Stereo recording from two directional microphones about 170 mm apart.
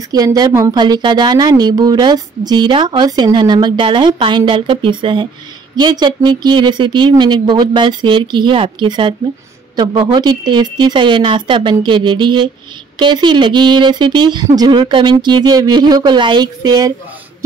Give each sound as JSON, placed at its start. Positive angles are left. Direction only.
{"t": 0.1, "sound": "a woman's voice", "side_deg": -20}